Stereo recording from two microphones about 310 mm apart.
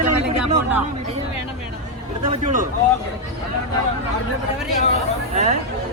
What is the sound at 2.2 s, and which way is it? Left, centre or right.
Speech, right.